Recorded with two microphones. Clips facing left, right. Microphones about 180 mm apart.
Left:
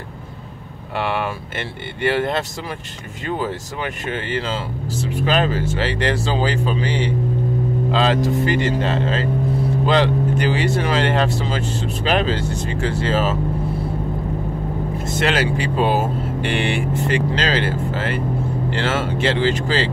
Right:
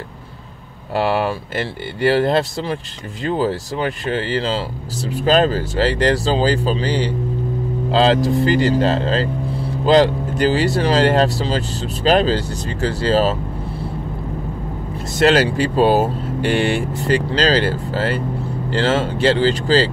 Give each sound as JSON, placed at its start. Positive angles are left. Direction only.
{"t": 0.9, "sound": "speech", "side_deg": -35}
{"t": 15.0, "sound": "speech", "side_deg": -35}